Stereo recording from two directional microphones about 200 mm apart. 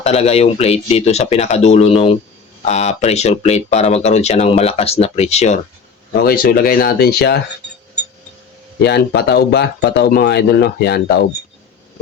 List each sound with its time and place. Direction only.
0.0 s speech: 30° left (ahead or behind)
6.2 s speech: 45° left (ahead or behind)
8.8 s speech: 55° left (ahead or behind)